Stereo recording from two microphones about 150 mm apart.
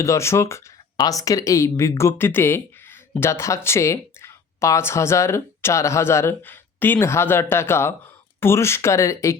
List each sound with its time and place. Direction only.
0.0 s speech: 20° left (ahead or behind)